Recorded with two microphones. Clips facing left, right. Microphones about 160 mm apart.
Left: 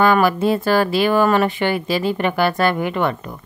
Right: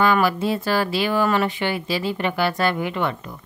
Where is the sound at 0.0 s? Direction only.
50° left (ahead or behind).